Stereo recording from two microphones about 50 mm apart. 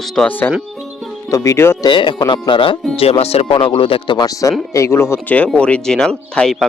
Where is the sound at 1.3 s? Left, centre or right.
Left.